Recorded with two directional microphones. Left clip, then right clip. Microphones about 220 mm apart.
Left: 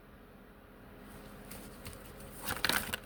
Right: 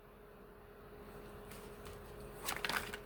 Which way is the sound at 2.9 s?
40° left (ahead or behind).